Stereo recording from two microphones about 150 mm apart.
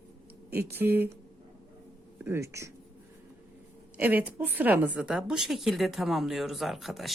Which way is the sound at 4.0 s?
10° right (ahead or behind).